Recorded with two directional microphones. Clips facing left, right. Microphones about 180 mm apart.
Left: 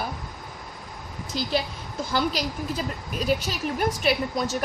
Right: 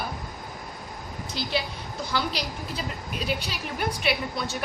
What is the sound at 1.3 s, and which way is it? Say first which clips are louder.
A woman's voice: left 3 dB; 45° left (ahead or behind).